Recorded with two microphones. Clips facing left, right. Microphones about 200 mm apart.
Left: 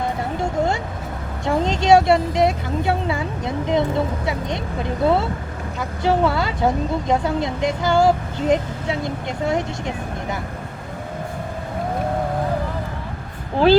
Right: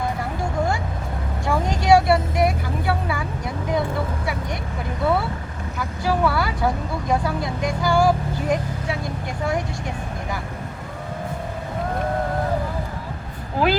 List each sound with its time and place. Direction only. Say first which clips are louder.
0.3 s vehicle: left 3 dB; 20° left (ahead or behind)
1.5 s speech: left 2 dB; 25° left (ahead or behind)